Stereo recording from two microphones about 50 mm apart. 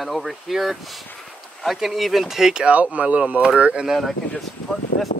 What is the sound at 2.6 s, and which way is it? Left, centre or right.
Speech, right.